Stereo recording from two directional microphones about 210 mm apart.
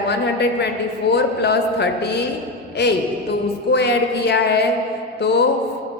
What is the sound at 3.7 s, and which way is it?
Speech, 55° left (ahead or behind).